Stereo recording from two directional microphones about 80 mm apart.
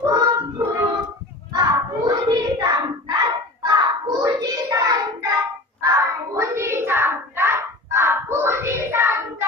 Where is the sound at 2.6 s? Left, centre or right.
Right.